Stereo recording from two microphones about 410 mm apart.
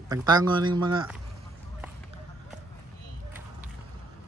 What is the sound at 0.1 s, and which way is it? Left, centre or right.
Speech, centre.